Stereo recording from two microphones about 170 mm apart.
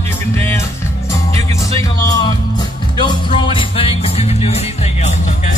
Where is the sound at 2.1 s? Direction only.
25° left (ahead or behind).